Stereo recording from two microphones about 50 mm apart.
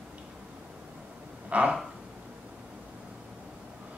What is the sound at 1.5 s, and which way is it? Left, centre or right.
Speech, right.